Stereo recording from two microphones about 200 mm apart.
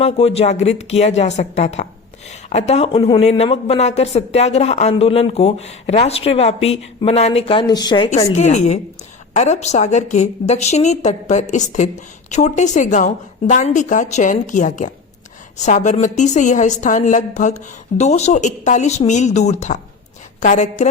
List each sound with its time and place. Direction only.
0.0 s speech: 30° left (ahead or behind)
8.3 s speech: 35° left (ahead or behind)